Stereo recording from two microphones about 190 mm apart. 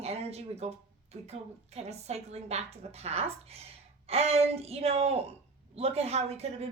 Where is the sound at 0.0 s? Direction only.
35° right (ahead or behind).